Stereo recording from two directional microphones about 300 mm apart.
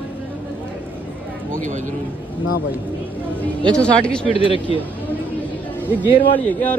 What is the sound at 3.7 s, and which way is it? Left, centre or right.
Speech, centre.